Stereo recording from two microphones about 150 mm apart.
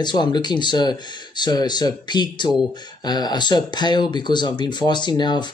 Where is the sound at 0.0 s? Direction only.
30° left (ahead or behind).